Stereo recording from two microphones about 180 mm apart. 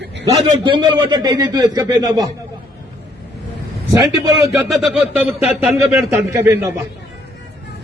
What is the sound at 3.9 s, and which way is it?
Speech, 20° right (ahead or behind).